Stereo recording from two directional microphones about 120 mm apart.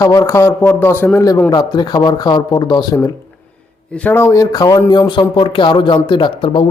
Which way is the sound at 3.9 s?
10° left (ahead or behind).